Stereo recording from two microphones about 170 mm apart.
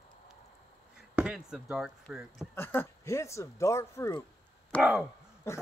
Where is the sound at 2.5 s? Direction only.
15° left (ahead or behind).